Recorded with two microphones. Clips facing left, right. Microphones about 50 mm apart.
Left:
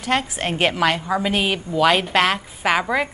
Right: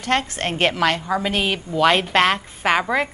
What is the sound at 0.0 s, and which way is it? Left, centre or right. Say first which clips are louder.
A woman's voice: even; centre.